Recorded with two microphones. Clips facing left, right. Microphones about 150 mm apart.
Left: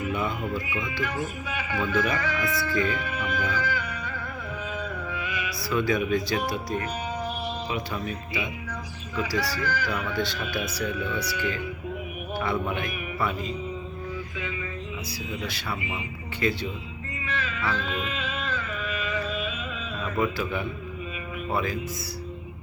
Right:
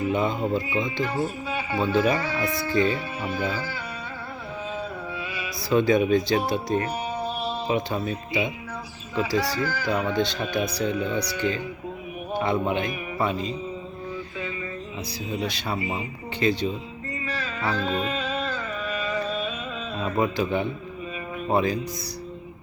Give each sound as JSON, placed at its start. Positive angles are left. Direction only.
{"t": 0.1, "sound": "speech", "side_deg": -25}
{"t": 9.6, "sound": "speech", "side_deg": -35}
{"t": 10.2, "sound": "speech", "side_deg": -20}
{"t": 12.6, "sound": "speech", "side_deg": -25}
{"t": 15.4, "sound": "speech", "side_deg": -25}
{"t": 16.4, "sound": "speech", "side_deg": -20}
{"t": 17.2, "sound": "music", "side_deg": -35}
{"t": 20.0, "sound": "speech", "side_deg": -30}